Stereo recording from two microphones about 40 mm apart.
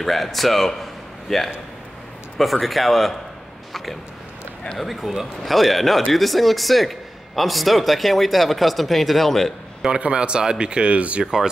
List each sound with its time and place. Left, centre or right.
0.0 s a man's voice: centre
4.7 s a man's voice: centre
9.8 s speech: right